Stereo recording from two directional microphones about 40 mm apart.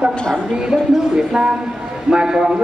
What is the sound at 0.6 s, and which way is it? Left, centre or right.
A man's voice, centre.